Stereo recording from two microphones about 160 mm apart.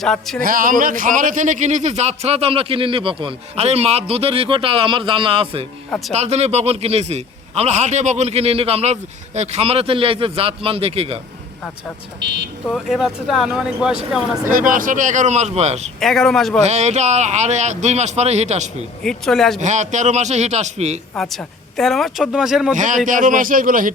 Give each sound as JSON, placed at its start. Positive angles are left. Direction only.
{"t": 0.0, "sound": "speech", "side_deg": 0}
{"t": 0.4, "sound": "speech", "side_deg": -60}
{"t": 5.9, "sound": "speech", "side_deg": 0}
{"t": 6.1, "sound": "speech", "side_deg": -45}
{"t": 12.2, "sound": "speech", "side_deg": -90}
{"t": 12.6, "sound": "speech", "side_deg": 0}
{"t": 14.5, "sound": "speech", "side_deg": -55}
{"t": 16.0, "sound": "speech", "side_deg": 0}
{"t": 16.6, "sound": "speech", "side_deg": -45}
{"t": 19.0, "sound": "speech", "side_deg": 0}
{"t": 19.5, "sound": "speech", "side_deg": -50}
{"t": 21.2, "sound": "speech", "side_deg": 0}
{"t": 22.7, "sound": "a man's voice", "side_deg": -50}